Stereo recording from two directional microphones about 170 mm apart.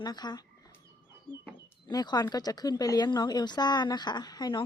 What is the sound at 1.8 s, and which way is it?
Speech, 25° left (ahead or behind).